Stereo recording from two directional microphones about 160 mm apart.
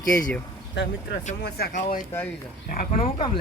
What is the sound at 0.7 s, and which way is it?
Speech, 90° left.